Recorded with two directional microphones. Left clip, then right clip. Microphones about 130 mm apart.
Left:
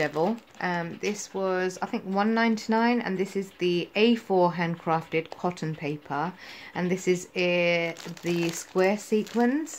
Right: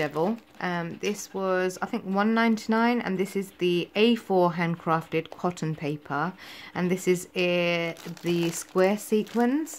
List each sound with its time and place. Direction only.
0.0 s speech: 20° right (ahead or behind)